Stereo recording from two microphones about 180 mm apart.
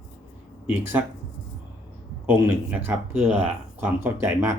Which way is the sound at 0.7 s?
10° right (ahead or behind).